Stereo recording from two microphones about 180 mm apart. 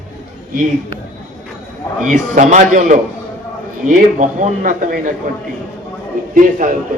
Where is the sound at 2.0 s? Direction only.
45° right (ahead or behind).